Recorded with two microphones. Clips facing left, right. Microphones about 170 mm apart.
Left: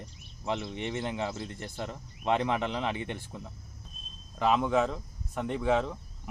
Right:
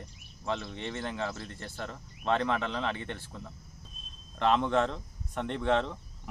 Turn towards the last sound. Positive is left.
turn(degrees=5)  # may be behind; listen again after turning